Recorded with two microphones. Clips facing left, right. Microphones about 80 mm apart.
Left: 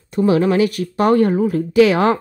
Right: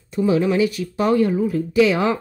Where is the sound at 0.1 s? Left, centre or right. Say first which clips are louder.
Left 3 dB; left.